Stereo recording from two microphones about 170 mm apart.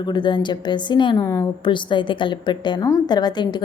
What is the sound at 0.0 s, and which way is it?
A woman's voice, 25° left (ahead or behind).